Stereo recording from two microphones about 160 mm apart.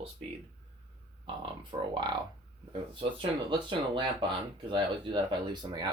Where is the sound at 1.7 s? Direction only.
30° right (ahead or behind).